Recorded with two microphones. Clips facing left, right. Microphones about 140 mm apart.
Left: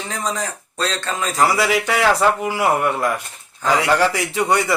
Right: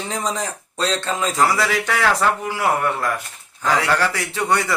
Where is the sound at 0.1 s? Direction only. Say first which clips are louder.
Even; 20° right (ahead or behind).